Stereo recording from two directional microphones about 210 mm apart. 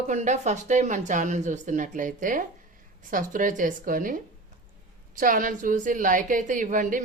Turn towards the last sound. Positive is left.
turn(degrees=-40)  # may be behind; listen again after turning